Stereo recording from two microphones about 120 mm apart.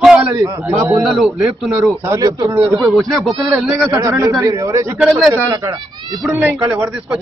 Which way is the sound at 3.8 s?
25° right (ahead or behind).